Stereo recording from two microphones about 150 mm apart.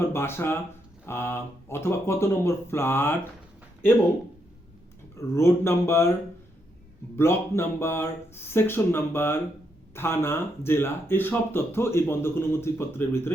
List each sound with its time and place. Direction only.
0.0 s speech: 15° left (ahead or behind)
5.1 s speech: 20° left (ahead or behind)
7.2 s speech: 15° left (ahead or behind)